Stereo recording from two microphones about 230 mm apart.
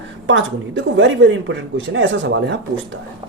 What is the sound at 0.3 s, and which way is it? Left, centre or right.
A woman's voice, right.